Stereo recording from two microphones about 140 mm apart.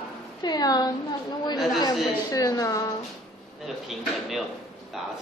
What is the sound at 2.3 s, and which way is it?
Speech, 25° left (ahead or behind).